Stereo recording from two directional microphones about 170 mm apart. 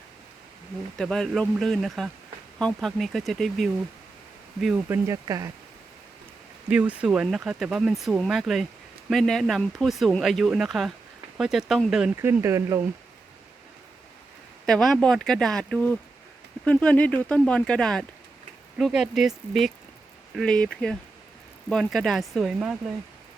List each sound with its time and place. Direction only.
0.9 s speech: 5° left (ahead or behind)
5.0 s speech: 20° right (ahead or behind)
6.7 s speech: 10° right (ahead or behind)
12.1 s speech: 15° right (ahead or behind)
14.7 s speech: 5° left (ahead or behind)